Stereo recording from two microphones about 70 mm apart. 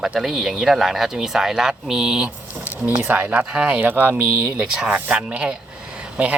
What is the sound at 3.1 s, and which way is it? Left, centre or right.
Speech, right.